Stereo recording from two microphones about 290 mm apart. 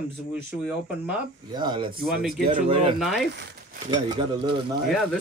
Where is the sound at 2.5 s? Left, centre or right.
Centre.